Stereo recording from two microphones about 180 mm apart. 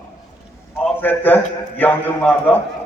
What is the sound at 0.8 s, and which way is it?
A man's voice, 10° left (ahead or behind).